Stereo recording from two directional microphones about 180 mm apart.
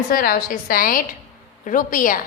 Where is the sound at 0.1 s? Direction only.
50° left (ahead or behind).